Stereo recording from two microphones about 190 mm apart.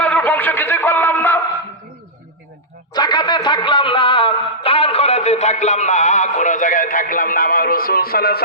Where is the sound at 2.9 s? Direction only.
20° left (ahead or behind).